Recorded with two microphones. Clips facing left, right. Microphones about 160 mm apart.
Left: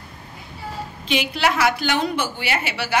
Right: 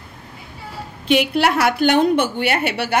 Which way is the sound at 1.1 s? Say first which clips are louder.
Right 5 dB; 55° right (ahead or behind).